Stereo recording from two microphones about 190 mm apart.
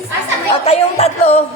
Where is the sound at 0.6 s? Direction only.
35° left (ahead or behind).